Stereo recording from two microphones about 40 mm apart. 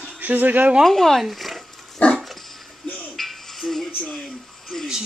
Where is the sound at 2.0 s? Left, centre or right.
Left.